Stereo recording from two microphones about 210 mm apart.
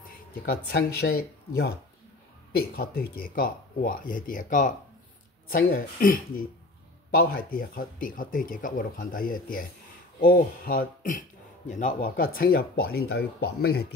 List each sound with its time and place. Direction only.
0.0 s a sound: 45° left (ahead or behind)
1.0 s speech: 45° left (ahead or behind)
2.7 s speech: 45° left (ahead or behind)